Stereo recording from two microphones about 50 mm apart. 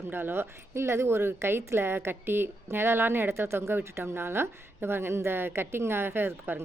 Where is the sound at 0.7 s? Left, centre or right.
Right.